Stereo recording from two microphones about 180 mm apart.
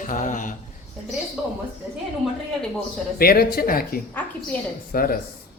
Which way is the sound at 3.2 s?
55° left (ahead or behind).